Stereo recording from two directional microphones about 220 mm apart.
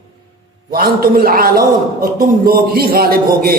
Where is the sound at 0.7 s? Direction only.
40° right (ahead or behind).